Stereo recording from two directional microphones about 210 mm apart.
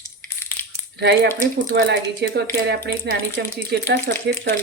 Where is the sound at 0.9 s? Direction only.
55° right (ahead or behind).